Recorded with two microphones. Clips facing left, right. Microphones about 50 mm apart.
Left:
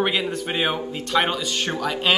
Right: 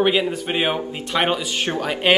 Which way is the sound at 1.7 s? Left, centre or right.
Right.